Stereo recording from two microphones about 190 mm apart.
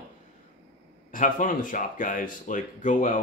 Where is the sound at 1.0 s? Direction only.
45° left (ahead or behind).